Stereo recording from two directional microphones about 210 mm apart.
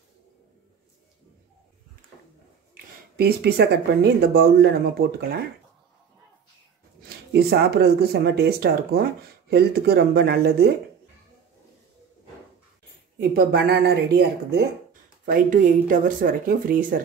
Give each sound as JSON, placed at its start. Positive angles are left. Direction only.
{"t": 2.7, "sound": "speech", "side_deg": -45}
{"t": 7.0, "sound": "speech", "side_deg": -50}
{"t": 13.3, "sound": "speech", "side_deg": -45}
{"t": 15.2, "sound": "speech", "side_deg": -40}